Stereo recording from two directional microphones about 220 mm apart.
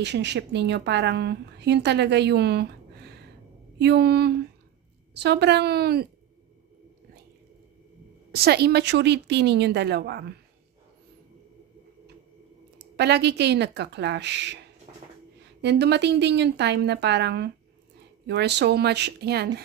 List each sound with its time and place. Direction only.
0.0 s a woman's voice: 50° right (ahead or behind)
8.4 s a woman's voice: 45° right (ahead or behind)
12.7 s a woman's voice: 50° right (ahead or behind)